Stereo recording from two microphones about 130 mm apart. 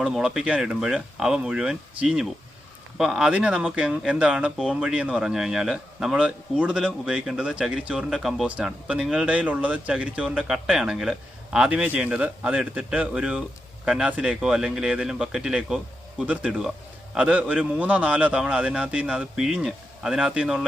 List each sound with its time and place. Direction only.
0.0 s speech: 5° right (ahead or behind)